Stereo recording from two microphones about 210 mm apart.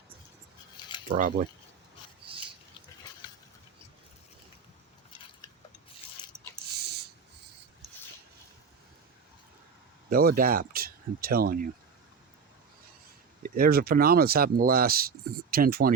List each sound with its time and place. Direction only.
1.1 s speech: 40° right (ahead or behind)
10.1 s speech: 45° right (ahead or behind)
13.4 s speech: 45° right (ahead or behind)